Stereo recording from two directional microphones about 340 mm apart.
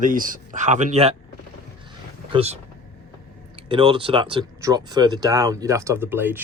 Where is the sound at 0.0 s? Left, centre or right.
Right.